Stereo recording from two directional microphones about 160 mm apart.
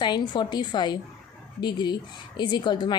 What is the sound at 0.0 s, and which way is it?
A woman's voice, 30° left (ahead or behind).